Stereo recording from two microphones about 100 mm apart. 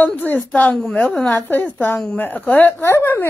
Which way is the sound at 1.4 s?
20° left (ahead or behind).